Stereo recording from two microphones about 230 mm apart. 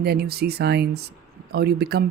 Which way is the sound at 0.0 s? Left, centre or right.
Right.